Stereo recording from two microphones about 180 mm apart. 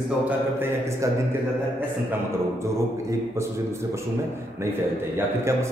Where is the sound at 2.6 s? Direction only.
15° right (ahead or behind).